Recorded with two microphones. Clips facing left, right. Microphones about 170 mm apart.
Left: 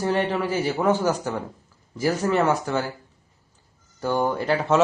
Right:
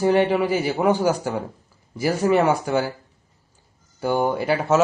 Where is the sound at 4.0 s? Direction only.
10° right (ahead or behind).